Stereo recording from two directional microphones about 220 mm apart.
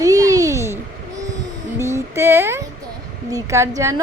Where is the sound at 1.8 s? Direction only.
10° right (ahead or behind).